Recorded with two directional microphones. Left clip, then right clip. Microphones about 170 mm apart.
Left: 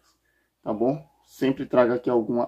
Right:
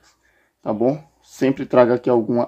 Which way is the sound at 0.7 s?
50° right (ahead or behind).